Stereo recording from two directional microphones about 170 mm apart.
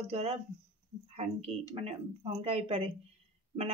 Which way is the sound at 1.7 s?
40° right (ahead or behind).